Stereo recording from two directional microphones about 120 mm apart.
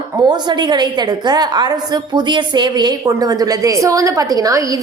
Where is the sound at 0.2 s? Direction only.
35° right (ahead or behind).